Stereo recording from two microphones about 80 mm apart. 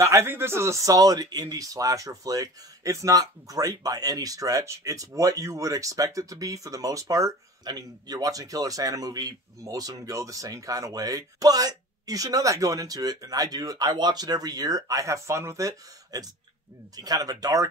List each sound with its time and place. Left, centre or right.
0.0 s speech: right
7.6 s speech: right